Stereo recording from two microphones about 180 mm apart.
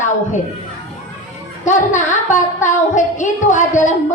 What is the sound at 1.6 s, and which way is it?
A woman's voice, 45° left (ahead or behind).